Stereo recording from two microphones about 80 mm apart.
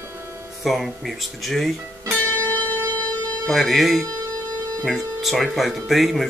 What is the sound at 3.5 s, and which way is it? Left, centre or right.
Speech, centre.